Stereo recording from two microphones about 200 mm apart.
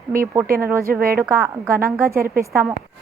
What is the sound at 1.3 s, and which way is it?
Speech, 15° right (ahead or behind).